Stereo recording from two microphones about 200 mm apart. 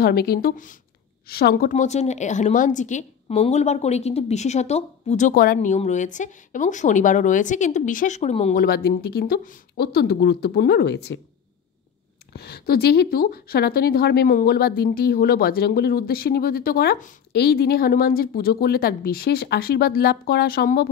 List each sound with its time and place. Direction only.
0.0 s a woman's voice: 50° left (ahead or behind); by 8.5 s 35° left (ahead or behind)
8.5 s a woman's voice: 50° left (ahead or behind)
12.3 s a woman's voice: 50° left (ahead or behind)